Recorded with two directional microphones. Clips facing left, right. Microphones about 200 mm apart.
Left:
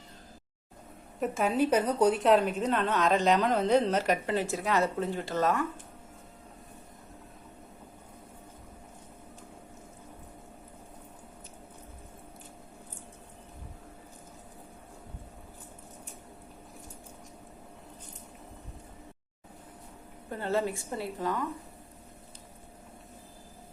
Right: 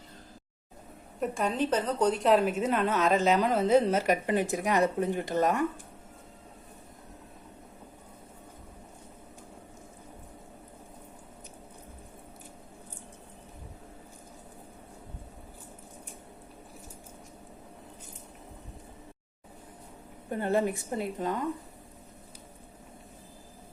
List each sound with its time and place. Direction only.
1.2 s a woman's voice: 5° left (ahead or behind); by 5.6 s 15° right (ahead or behind)
20.3 s a woman's voice: 15° right (ahead or behind)